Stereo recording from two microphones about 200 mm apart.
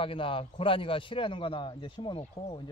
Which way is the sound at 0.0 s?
25° left (ahead or behind).